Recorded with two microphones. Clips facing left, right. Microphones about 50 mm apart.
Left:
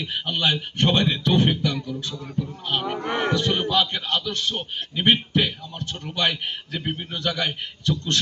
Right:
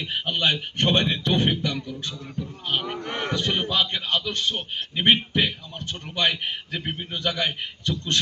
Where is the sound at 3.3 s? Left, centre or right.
Right.